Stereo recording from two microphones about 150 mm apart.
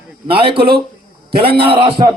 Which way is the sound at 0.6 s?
90° right.